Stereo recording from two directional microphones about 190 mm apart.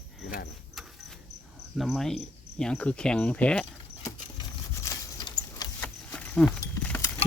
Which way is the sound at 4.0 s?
15° left (ahead or behind).